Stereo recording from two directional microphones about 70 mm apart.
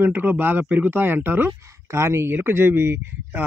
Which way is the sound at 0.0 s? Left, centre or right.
Right.